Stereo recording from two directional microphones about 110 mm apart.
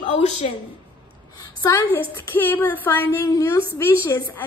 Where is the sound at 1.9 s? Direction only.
15° left (ahead or behind).